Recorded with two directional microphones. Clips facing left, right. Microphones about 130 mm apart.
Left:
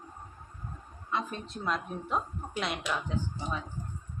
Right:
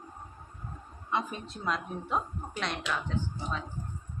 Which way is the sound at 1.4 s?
Centre (ahead or behind).